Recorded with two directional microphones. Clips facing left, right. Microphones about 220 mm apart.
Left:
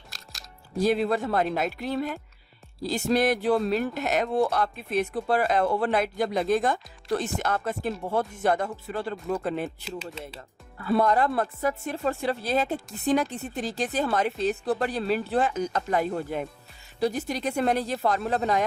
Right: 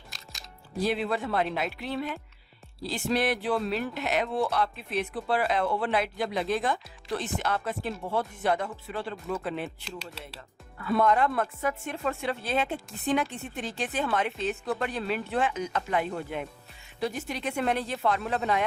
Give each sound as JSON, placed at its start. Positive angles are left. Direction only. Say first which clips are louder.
{"t": 0.8, "sound": "speech", "louder": "left 5 dB", "side_deg": 45}
{"t": 9.6, "sound": "speech", "louder": "left 4 dB", "side_deg": 0}
{"t": 10.8, "sound": "speech", "louder": "left 2 dB", "side_deg": 35}